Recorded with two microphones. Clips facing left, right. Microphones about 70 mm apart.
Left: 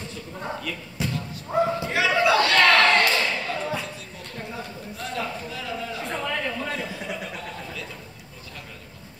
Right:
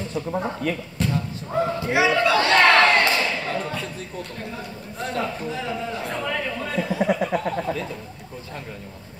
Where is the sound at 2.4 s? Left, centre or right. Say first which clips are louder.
Right 5 dB; right.